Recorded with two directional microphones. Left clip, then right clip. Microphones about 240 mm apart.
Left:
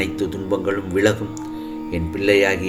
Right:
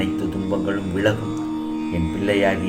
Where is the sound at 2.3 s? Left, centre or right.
Left.